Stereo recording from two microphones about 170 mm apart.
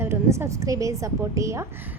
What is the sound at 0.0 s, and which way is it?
A woman's voice, 15° right (ahead or behind).